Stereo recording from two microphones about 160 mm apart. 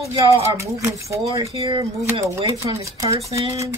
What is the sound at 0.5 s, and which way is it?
Speech, 20° right (ahead or behind).